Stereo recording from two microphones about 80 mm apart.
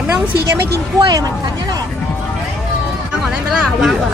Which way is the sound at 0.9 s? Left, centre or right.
Right.